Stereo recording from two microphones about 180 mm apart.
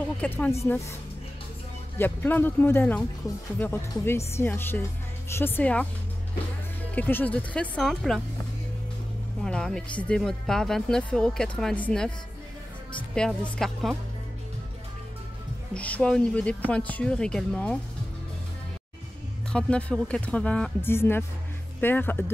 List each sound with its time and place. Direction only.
0.2 s speech: 10° left (ahead or behind)
2.0 s speech: 10° left (ahead or behind)
7.0 s speech: 10° left (ahead or behind)
9.4 s speech: 5° left (ahead or behind)
13.1 s speech: 5° left (ahead or behind)
15.7 s speech: 5° left (ahead or behind)
19.5 s speech: 5° left (ahead or behind)